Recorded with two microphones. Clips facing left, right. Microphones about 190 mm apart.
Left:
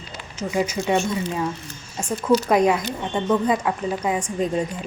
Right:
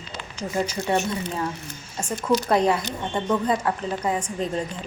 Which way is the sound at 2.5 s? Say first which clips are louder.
Left 2 dB; 10° left (ahead or behind).